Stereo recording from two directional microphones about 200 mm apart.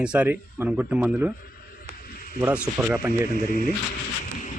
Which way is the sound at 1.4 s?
45° left (ahead or behind).